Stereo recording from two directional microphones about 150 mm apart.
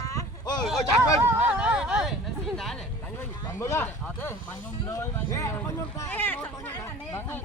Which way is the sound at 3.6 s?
15° left (ahead or behind).